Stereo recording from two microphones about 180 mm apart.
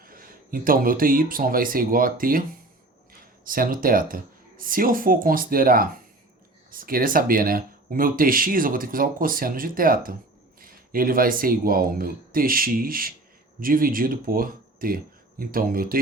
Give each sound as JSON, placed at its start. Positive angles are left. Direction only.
{"t": 0.0, "sound": "speech", "side_deg": -50}